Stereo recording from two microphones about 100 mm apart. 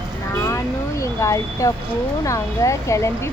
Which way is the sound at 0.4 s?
30° left (ahead or behind).